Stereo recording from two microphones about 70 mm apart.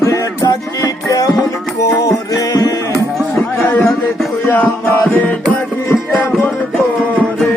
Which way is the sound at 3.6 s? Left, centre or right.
Left.